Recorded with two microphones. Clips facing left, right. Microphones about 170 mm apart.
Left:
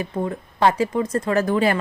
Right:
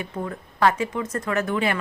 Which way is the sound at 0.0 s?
25° left (ahead or behind).